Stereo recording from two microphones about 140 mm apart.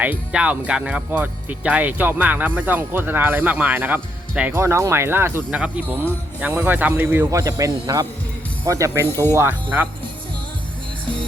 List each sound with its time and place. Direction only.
0.0 s speech: 10° right (ahead or behind)